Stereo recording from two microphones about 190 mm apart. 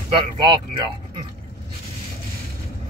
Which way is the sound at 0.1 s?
25° right (ahead or behind).